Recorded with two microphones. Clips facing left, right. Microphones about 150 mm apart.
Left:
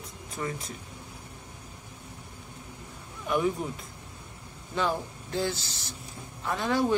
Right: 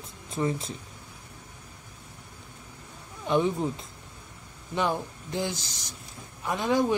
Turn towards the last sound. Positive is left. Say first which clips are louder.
# right 1 dB
turn(degrees=-15)  # may be behind; listen again after turning